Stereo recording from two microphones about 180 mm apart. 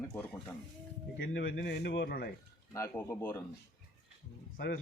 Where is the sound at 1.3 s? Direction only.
85° left; by 2.3 s 65° left (ahead or behind).